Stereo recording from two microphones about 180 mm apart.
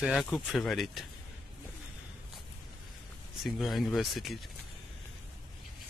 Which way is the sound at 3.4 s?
Centre (ahead or behind).